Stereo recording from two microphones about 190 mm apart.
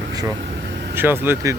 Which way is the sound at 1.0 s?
10° right (ahead or behind).